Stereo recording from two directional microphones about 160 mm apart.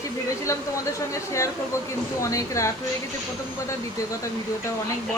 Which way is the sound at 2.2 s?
20° left (ahead or behind).